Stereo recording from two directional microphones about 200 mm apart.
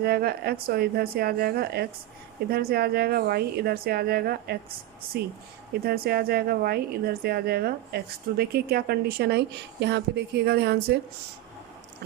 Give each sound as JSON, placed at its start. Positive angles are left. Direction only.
{"t": 0.0, "sound": "speech", "side_deg": -50}
{"t": 5.8, "sound": "speech", "side_deg": -50}